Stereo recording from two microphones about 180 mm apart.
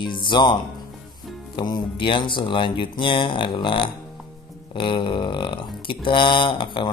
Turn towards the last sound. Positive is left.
turn(degrees=25)  # may be behind; listen again after turning